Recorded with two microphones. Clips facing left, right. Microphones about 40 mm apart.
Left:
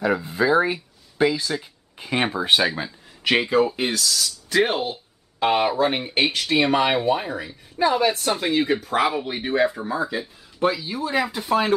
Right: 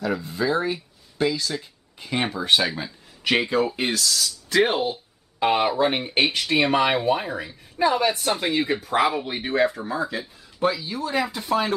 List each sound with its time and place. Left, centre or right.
0.0 s speech: centre